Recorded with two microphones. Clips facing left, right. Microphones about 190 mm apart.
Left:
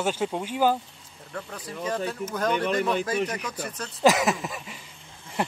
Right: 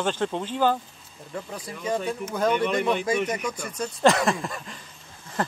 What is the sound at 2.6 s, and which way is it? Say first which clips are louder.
Speech: right 1 dB; 40° left (ahead or behind).